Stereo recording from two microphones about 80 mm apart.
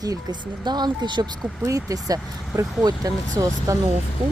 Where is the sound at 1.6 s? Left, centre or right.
Right.